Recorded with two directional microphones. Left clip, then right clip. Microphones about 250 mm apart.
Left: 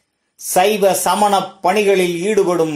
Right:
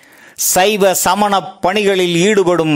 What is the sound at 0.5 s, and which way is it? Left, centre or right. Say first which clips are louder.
Speech: right 1 dB; right.